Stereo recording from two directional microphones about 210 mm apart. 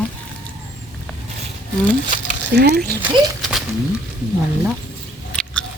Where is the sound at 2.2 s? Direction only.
50° right (ahead or behind).